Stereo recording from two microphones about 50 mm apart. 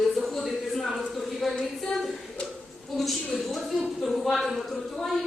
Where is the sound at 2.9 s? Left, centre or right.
Centre.